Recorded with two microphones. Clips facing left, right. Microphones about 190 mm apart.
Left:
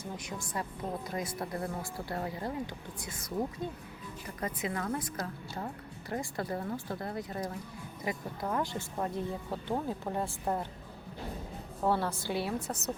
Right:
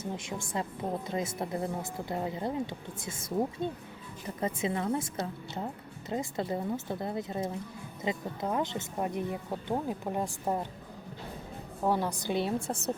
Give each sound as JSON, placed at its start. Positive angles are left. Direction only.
{"t": 0.0, "sound": "a woman's voice", "side_deg": -25}
{"t": 11.8, "sound": "a woman's voice", "side_deg": -15}